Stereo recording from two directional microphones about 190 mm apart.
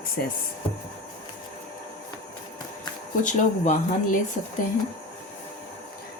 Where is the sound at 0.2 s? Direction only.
55° left (ahead or behind).